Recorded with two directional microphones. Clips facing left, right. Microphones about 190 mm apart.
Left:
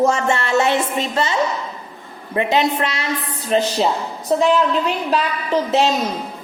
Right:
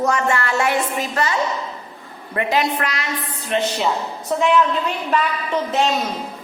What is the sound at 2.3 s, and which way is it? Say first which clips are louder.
A woman's voice: left 3 dB; 25° left (ahead or behind).